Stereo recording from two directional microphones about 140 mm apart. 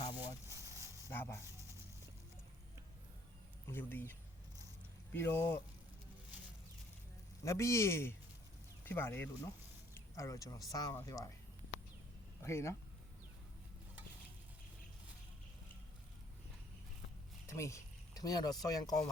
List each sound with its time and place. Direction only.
0.2 s a sound: 20° right (ahead or behind)
1.0 s a sound: 15° left (ahead or behind)
3.7 s speech: 15° left (ahead or behind)
5.1 s speech: 15° left (ahead or behind)
7.4 s speech: 20° left (ahead or behind)
12.4 s speech: 20° left (ahead or behind)
17.4 s speech: 20° left (ahead or behind)